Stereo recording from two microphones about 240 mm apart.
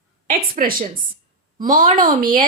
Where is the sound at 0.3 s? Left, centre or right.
Right.